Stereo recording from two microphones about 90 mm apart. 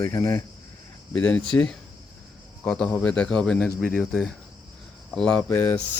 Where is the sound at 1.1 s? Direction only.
15° left (ahead or behind).